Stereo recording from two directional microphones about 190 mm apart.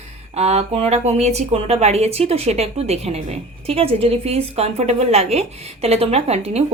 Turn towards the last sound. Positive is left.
turn(degrees=-35)  # may be behind; listen again after turning